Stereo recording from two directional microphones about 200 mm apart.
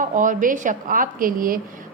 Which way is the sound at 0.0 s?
40° right (ahead or behind).